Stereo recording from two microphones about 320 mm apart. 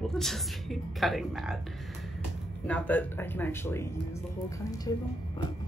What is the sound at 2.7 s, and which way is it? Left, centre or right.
Speech, centre.